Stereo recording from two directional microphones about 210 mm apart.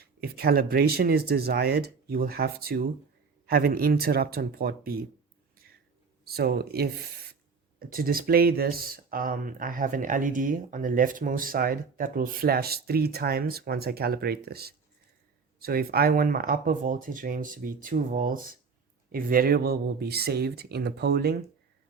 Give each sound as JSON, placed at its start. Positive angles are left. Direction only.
{"t": 0.0, "sound": "speech", "side_deg": -45}
{"t": 6.2, "sound": "speech", "side_deg": -50}